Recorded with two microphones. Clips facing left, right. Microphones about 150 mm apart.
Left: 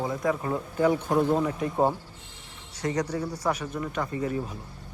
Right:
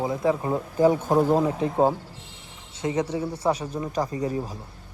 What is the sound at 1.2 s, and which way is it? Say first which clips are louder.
Speech: right 3 dB; 35° right (ahead or behind).